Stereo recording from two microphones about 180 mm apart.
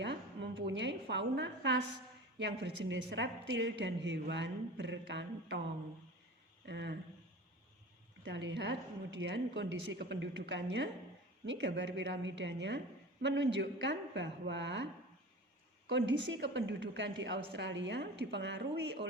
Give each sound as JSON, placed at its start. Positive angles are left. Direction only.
{"t": 0.0, "sound": "a sound", "side_deg": -75}
{"t": 2.4, "sound": "a woman's voice", "side_deg": -75}
{"t": 6.7, "sound": "a woman's voice", "side_deg": -75}
{"t": 8.2, "sound": "a woman's voice", "side_deg": -80}
{"t": 15.9, "sound": "a woman's voice", "side_deg": -85}